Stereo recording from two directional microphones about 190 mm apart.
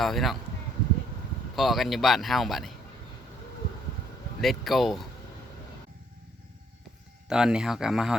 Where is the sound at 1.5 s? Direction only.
Centre (ahead or behind).